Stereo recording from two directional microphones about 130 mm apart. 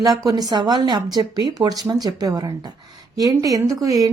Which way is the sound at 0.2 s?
30° right (ahead or behind).